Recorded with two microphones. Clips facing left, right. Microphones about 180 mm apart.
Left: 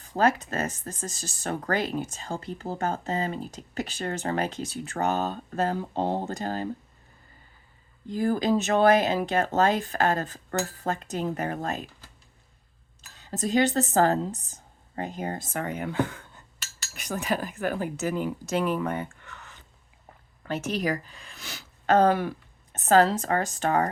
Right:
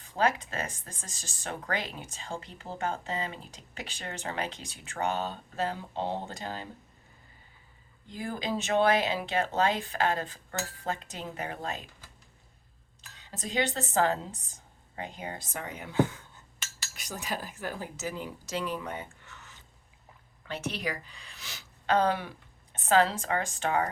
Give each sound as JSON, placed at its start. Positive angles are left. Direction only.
{"t": 0.0, "sound": "speech", "side_deg": 45}
{"t": 8.1, "sound": "speech", "side_deg": 40}
{"t": 13.1, "sound": "speech", "side_deg": 40}
{"t": 20.4, "sound": "speech", "side_deg": 45}